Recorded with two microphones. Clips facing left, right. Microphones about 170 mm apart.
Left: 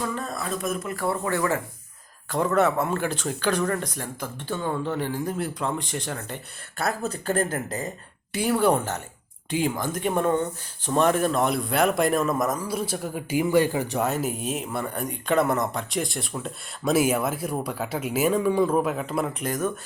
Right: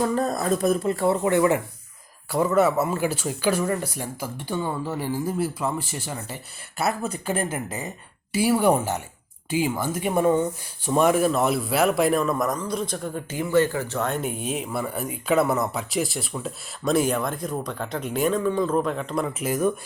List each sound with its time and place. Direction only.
0.0 s speech: 40° right (ahead or behind); by 1.6 s 20° right (ahead or behind)
2.3 s speech: 5° right (ahead or behind); by 14.1 s 15° left (ahead or behind)
14.1 s speech: centre (ahead or behind)